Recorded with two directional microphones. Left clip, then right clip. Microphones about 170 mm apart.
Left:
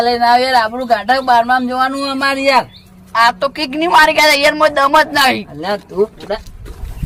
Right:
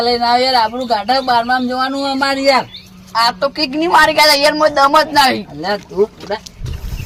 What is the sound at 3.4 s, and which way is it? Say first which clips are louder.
Speech: right 1 dB; 10° left (ahead or behind).